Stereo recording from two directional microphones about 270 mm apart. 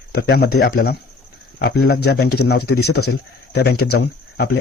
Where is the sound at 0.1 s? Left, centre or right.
Left.